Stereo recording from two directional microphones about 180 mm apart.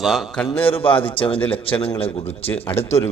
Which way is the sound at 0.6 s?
30° left (ahead or behind).